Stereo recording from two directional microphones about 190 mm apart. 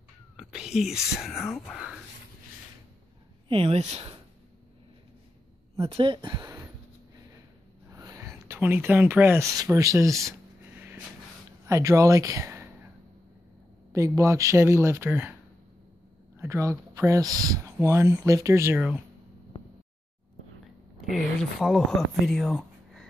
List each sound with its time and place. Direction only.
0.4 s cat: 5° right (ahead or behind)
1.1 s speech: centre (ahead or behind)
3.4 s speech: 30° right (ahead or behind)
5.8 s speech: 25° right (ahead or behind)
7.9 s speech: 15° right (ahead or behind)
11.6 s speech: 15° right (ahead or behind)
13.9 s speech: 15° right (ahead or behind)
16.3 s speech: 15° right (ahead or behind)
21.0 s speech: centre (ahead or behind)